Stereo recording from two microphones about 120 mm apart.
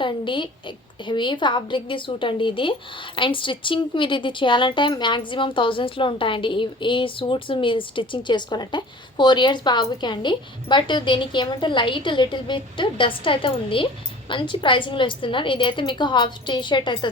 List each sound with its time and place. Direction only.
0.0 s speech: 45° left (ahead or behind)